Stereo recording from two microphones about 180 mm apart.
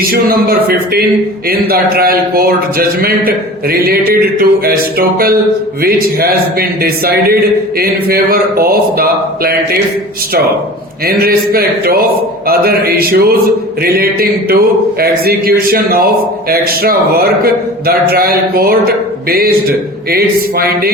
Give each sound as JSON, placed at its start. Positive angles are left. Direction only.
{"t": 0.0, "sound": "a man's voice", "side_deg": -55}
{"t": 11.0, "sound": "a man's voice", "side_deg": -55}